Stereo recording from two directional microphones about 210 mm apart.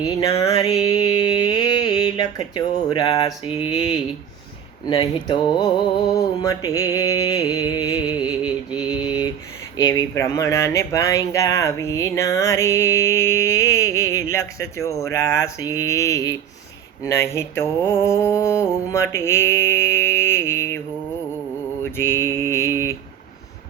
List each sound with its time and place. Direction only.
0.3 s speech: 30° left (ahead or behind)
0.8 s a sound: 20° left (ahead or behind)
4.9 s speech: 25° left (ahead or behind)
9.7 s speech: 20° left (ahead or behind)
21.9 s speech: 10° left (ahead or behind)